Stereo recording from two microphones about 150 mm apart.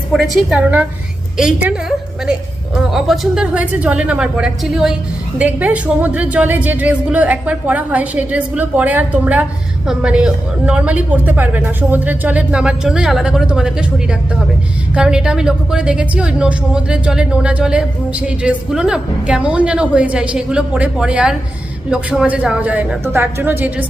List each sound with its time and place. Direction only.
0.1 s a woman's voice: centre (ahead or behind)
0.6 s a woman's voice: 10° right (ahead or behind)